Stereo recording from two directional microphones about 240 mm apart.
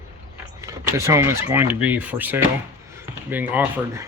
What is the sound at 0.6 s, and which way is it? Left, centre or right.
Speech, centre.